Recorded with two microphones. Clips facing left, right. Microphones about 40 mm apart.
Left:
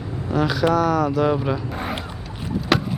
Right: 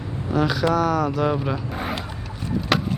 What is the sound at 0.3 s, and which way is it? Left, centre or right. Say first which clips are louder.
Speech: left 1 dB; centre.